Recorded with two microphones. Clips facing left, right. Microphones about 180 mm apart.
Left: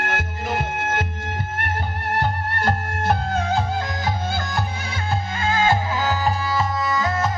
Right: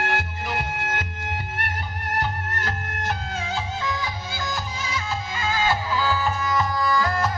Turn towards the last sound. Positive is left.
turn(degrees=25)  # may be behind; listen again after turning